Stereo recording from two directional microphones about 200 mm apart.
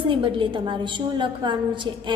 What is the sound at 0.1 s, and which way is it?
A woman's voice, 25° right (ahead or behind).